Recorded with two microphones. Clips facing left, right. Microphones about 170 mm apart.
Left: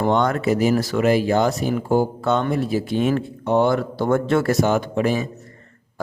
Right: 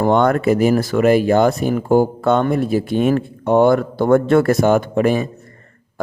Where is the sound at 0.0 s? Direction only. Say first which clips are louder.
Right 5 dB; 55° right (ahead or behind).